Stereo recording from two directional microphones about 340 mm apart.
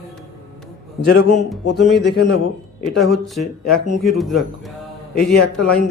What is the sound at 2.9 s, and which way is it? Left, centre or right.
A man's voice, centre.